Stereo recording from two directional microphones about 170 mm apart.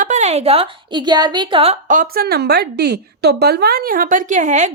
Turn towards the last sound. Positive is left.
turn(degrees=-45)  # may be behind; listen again after turning